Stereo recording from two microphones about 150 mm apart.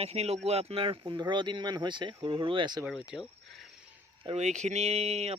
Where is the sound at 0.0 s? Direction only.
45° right (ahead or behind).